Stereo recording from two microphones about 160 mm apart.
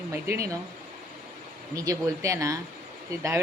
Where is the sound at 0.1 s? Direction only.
15° right (ahead or behind).